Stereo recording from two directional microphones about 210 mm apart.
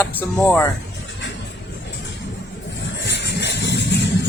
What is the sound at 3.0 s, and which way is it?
Music, 55° left (ahead or behind).